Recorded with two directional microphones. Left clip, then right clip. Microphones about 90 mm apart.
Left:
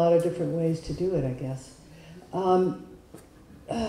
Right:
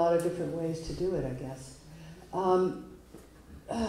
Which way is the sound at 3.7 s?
30° left (ahead or behind).